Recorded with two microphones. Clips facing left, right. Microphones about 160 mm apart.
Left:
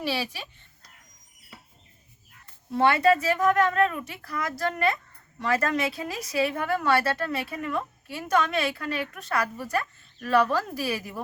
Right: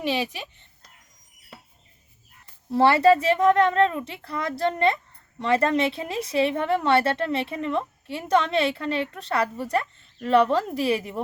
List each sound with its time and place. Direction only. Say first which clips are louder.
0.0 s a child's voice: right 3 dB; 20° right (ahead or behind)
2.7 s a woman's voice: right 4 dB; 30° right (ahead or behind)